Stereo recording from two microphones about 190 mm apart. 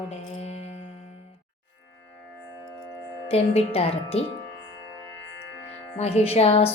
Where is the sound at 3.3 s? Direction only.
30° left (ahead or behind).